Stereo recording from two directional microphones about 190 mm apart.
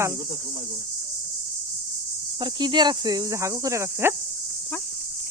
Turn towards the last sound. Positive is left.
turn(degrees=-15)  # may be behind; listen again after turning